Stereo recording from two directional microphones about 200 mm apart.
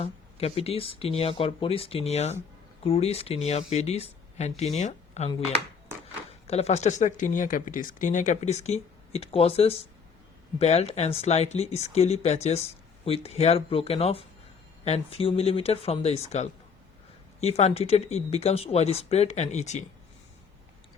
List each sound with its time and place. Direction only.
0.0 s speech: 30° left (ahead or behind)
6.5 s speech: 30° left (ahead or behind)